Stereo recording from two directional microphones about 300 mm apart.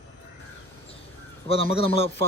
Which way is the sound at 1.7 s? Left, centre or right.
Centre.